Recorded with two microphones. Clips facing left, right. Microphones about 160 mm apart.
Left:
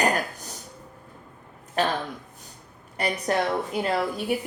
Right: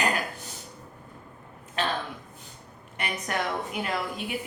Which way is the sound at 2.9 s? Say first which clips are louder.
Left 6 dB; 35° left (ahead or behind).